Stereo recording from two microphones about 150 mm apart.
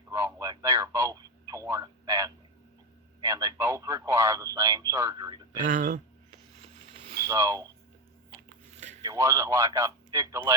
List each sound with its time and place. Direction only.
0.1 s telephone: 20° right (ahead or behind)
3.2 s radio: 25° right (ahead or behind)
5.6 s speech: 60° right (ahead or behind)
7.3 s a sound: 20° right (ahead or behind)
9.0 s radio: 20° right (ahead or behind)